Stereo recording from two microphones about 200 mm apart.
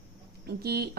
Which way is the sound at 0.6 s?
50° right (ahead or behind).